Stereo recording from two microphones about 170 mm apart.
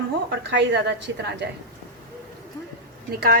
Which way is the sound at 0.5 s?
90° right.